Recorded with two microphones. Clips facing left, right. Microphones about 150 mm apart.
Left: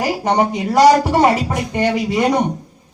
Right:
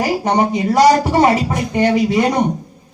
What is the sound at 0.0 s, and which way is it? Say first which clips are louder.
A man's voice: right 1 dB; centre (ahead or behind).